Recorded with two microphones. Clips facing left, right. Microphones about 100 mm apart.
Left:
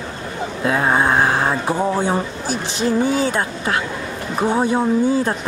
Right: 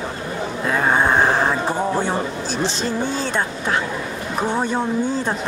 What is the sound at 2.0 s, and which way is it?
Speech, 10° left (ahead or behind).